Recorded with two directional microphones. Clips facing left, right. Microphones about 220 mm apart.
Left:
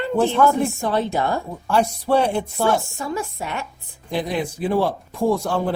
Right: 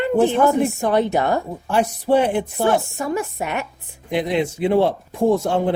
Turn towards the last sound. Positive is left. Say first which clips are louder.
# right 3 dB
turn(degrees=-20)  # may be behind; listen again after turning